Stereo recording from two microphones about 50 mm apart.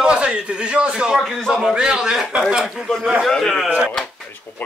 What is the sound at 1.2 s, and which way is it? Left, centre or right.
Speech, centre.